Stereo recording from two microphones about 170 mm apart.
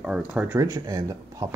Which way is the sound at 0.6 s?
20° right (ahead or behind).